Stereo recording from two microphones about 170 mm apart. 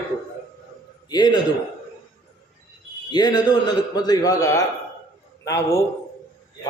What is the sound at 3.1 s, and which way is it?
A man's voice, 25° left (ahead or behind).